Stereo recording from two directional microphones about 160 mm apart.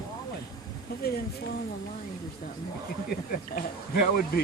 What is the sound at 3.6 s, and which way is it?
Speech, 70° left (ahead or behind).